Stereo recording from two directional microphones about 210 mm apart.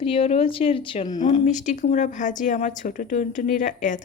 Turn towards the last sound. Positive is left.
turn(degrees=35)  # may be behind; listen again after turning